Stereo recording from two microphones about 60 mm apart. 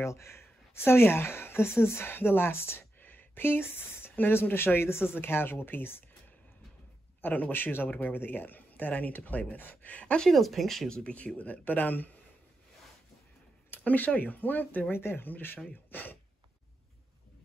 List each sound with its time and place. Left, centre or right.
0.0 s speech: left
7.2 s speech: left
10.2 s speech: centre
11.1 s speech: left
13.7 s speech: left